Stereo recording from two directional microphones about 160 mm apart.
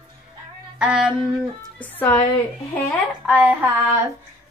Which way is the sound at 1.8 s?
10° left (ahead or behind).